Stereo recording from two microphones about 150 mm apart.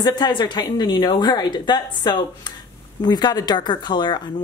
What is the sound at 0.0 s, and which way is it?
Speech, 30° left (ahead or behind).